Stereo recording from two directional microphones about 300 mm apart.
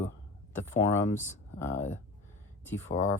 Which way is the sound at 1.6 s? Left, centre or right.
Centre.